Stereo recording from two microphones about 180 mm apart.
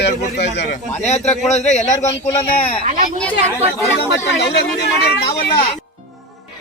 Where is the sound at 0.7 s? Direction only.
40° left (ahead or behind).